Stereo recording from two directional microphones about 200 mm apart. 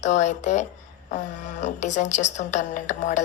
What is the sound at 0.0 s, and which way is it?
Speech, 35° left (ahead or behind).